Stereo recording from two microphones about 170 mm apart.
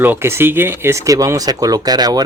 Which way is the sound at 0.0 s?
15° right (ahead or behind).